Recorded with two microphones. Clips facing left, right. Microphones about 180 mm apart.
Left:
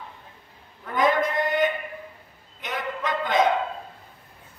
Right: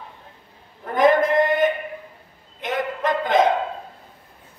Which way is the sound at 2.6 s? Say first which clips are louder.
Right 6 dB; 50° right (ahead or behind).